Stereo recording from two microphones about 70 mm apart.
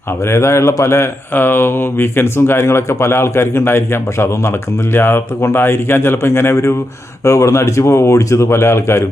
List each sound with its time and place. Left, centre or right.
0.3 s speech: left